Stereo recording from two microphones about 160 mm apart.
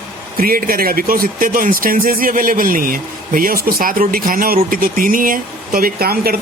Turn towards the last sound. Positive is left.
turn(degrees=-70)  # may be behind; listen again after turning